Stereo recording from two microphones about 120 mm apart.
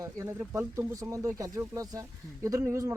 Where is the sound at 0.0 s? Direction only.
25° right (ahead or behind).